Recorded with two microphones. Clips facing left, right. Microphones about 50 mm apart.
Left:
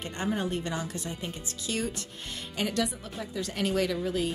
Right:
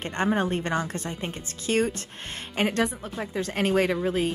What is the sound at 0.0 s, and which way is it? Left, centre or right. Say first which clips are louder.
Speech: right 6 dB; right.